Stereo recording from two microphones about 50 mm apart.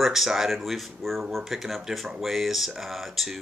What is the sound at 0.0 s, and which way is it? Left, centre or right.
Speech, centre.